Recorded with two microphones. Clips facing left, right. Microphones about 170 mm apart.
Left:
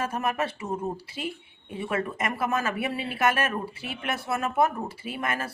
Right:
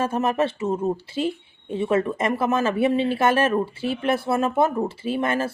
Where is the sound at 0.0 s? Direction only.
30° right (ahead or behind).